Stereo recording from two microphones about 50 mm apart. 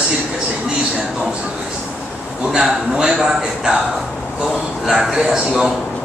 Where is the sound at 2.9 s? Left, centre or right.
Centre.